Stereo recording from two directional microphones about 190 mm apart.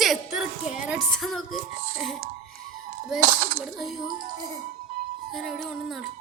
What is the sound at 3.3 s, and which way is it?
Speech, 40° right (ahead or behind).